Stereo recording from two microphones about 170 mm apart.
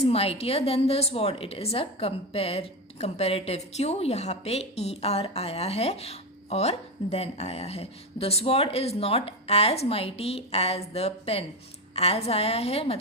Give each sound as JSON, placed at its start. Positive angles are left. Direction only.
{"t": 0.0, "sound": "a woman's voice", "side_deg": 35}